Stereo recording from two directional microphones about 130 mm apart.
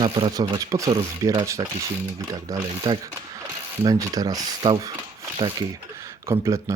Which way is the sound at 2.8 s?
40° right (ahead or behind).